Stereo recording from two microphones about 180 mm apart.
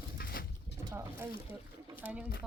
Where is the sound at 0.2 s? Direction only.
60° left (ahead or behind).